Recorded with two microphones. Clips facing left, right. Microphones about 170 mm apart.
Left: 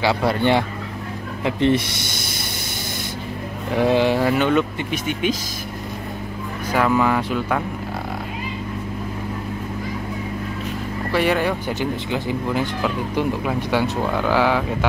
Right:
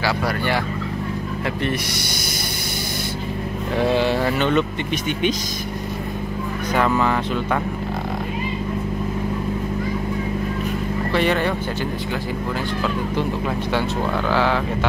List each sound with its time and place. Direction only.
0.0 s turkey: 25° left (ahead or behind)
3.7 s speech: 15° left (ahead or behind)
6.7 s speech: 5° left (ahead or behind)
11.1 s speech: 10° left (ahead or behind)